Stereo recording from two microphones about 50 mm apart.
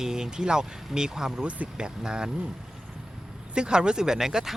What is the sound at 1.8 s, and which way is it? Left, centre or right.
Speech, centre.